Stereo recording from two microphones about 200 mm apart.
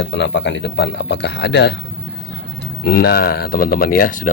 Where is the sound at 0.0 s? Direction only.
60° left (ahead or behind).